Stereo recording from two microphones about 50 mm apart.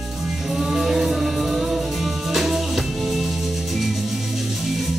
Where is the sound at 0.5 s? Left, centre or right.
Centre.